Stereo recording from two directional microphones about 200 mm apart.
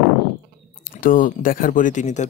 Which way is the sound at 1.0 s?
45° left (ahead or behind).